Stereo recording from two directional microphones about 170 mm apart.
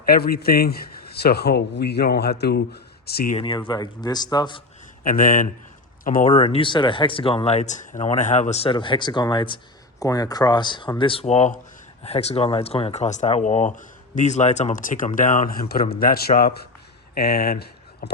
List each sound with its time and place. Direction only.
0.0 s a man's voice: 60° left (ahead or behind)
3.3 s speech: 30° left (ahead or behind)
5.0 s speech: 55° left (ahead or behind)
6.3 s a man's voice: 30° left (ahead or behind); by 18.1 s 65° left (ahead or behind)